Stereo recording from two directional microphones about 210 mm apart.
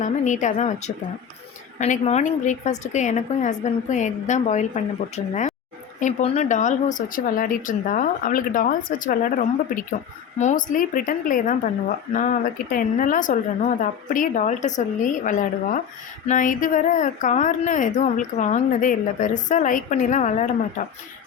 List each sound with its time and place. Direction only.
0.0 s speech: 35° left (ahead or behind)